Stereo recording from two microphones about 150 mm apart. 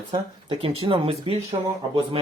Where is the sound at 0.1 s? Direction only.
35° right (ahead or behind).